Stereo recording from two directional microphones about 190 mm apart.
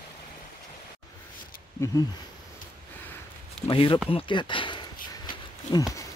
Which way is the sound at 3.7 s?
25° left (ahead or behind).